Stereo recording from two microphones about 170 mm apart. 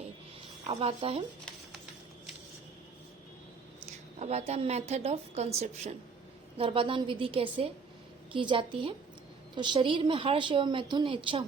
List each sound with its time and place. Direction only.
0.7 s a woman's voice: 35° right (ahead or behind)
3.8 s a woman's voice: 40° right (ahead or behind)